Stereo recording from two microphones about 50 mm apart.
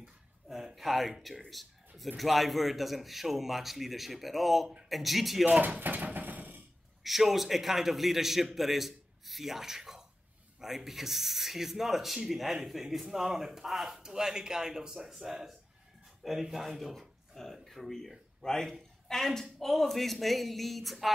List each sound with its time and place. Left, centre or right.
0.0 s a sound: centre
2.1 s a man's voice: centre
5.4 s speech: right
7.0 s a man's voice: centre